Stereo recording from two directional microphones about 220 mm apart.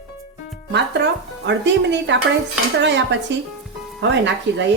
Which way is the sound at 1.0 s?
50° right (ahead or behind).